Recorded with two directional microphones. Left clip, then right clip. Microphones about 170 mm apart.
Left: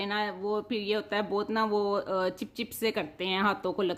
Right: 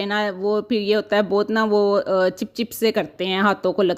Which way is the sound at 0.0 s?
40° right (ahead or behind).